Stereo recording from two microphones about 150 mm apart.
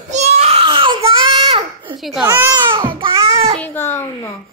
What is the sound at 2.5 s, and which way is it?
Babbling, 35° right (ahead or behind).